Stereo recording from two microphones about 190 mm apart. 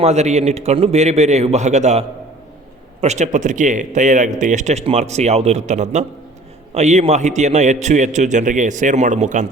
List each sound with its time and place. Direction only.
0.0 s a man's voice: 35° right (ahead or behind)